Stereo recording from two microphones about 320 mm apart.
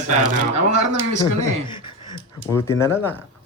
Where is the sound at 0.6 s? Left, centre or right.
Right.